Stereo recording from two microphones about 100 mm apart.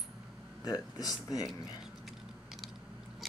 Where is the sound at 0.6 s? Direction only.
40° left (ahead or behind).